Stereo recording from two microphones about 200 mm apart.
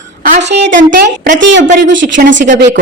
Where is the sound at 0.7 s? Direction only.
40° right (ahead or behind).